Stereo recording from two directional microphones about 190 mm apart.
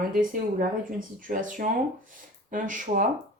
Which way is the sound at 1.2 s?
45° right (ahead or behind).